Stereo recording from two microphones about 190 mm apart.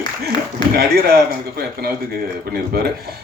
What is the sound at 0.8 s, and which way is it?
A man's voice, 55° right (ahead or behind).